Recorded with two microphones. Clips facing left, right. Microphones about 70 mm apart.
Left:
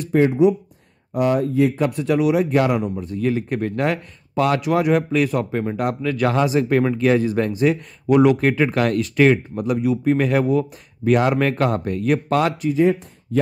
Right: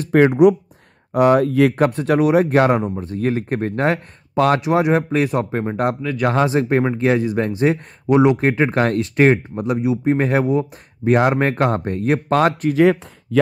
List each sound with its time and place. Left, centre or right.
0.1 s speech: right
1.8 s speech: right
4.6 s speech: right
7.5 s speech: right
8.1 s speech: right
12.6 s speech: right